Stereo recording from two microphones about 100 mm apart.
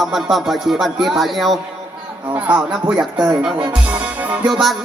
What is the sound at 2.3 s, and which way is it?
Speech, 15° right (ahead or behind).